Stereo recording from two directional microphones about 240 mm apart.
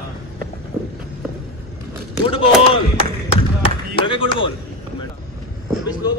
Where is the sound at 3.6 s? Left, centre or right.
Left.